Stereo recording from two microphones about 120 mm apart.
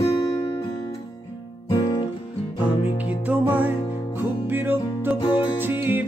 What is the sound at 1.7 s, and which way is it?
Music, 35° left (ahead or behind).